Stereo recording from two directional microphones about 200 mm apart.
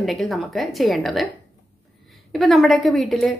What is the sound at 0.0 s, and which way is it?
Speech, centre (ahead or behind).